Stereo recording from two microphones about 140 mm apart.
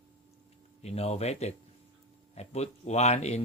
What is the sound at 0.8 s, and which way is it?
Speech, 50° left (ahead or behind).